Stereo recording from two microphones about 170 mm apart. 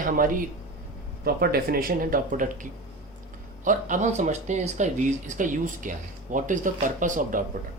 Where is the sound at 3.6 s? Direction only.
50° right (ahead or behind).